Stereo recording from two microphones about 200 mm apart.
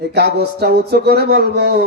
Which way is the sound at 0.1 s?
55° right (ahead or behind).